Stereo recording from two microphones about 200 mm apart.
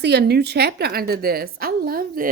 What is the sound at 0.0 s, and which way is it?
A woman's voice, 55° right (ahead or behind).